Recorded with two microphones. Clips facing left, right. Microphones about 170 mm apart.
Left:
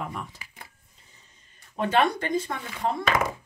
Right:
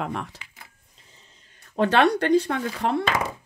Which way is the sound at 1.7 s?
75° right (ahead or behind).